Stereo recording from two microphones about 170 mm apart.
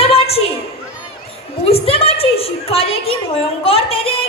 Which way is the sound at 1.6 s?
35° left (ahead or behind).